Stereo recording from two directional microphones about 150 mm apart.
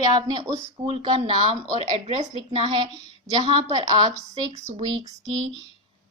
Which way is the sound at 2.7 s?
30° right (ahead or behind).